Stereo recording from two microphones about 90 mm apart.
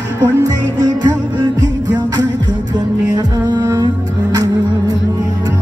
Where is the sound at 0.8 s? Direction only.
45° right (ahead or behind).